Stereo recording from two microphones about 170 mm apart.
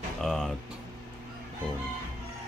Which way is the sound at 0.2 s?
Centre (ahead or behind).